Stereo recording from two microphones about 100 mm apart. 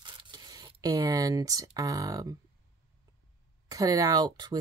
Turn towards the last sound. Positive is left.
turn(degrees=-40)  # may be behind; listen again after turning